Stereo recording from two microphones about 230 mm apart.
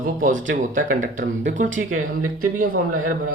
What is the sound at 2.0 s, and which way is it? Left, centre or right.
Speech, right.